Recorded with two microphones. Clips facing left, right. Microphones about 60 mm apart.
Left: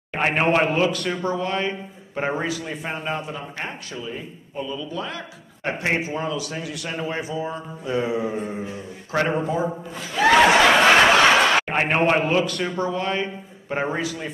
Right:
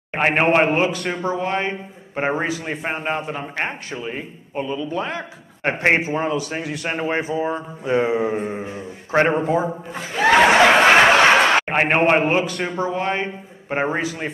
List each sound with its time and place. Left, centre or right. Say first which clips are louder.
0.1 s a man's voice: right 3 dB; right
2.6 s a man's voice: right 4 dB; right
10.1 s snicker: right 1 dB; centre
12.6 s a man's voice: right 2 dB; right